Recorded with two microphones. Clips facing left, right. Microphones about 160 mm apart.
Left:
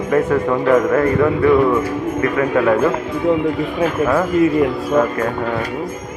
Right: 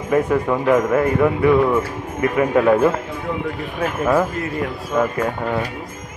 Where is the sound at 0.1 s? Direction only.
10° right (ahead or behind).